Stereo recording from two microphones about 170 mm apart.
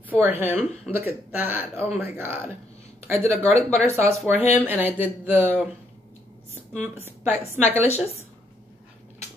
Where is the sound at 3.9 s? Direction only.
15° right (ahead or behind).